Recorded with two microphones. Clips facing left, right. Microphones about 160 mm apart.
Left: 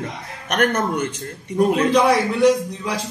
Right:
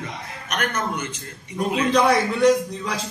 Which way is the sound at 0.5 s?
50° left (ahead or behind).